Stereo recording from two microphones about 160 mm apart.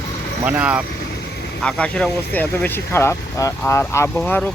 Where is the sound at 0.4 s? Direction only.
10° right (ahead or behind).